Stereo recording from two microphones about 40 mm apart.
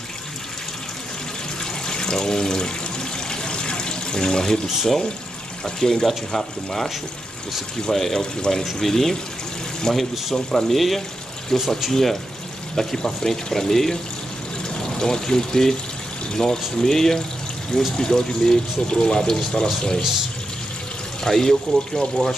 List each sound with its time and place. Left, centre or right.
1.6 s water: centre
5.8 s speech: centre
7.9 s speech: centre
9.9 s speech: centre
10.3 s speech: centre
15.0 s speech: centre
21.2 s speech: centre